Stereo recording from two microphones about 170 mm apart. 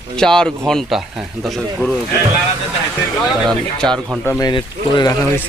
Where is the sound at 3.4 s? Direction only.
5° left (ahead or behind).